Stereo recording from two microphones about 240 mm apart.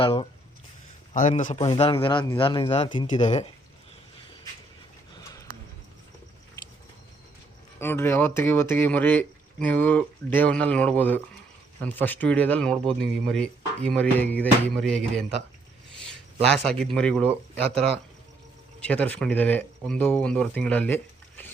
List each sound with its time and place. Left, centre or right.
0.0 s speech: left
1.1 s speech: left
7.8 s speech: centre
16.4 s speech: centre
18.9 s speech: centre